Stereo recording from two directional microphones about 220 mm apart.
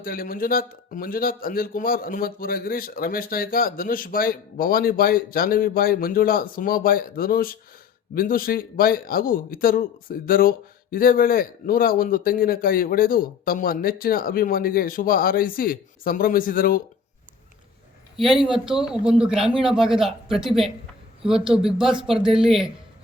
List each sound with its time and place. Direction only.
0.0 s speech: 40° left (ahead or behind)
18.2 s a man's voice: centre (ahead or behind)